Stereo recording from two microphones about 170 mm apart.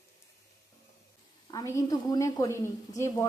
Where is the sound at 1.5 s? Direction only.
20° left (ahead or behind).